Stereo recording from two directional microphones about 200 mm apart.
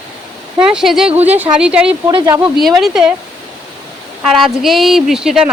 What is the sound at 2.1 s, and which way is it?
Speech, 25° right (ahead or behind).